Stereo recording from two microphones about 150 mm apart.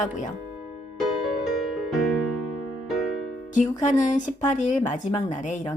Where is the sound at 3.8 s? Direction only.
55° left (ahead or behind).